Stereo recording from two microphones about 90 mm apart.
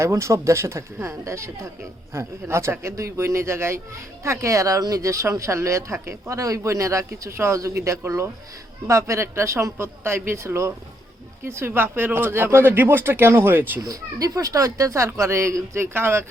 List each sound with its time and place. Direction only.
0.0 s speech: 30° right (ahead or behind)
13.8 s speech: 40° right (ahead or behind)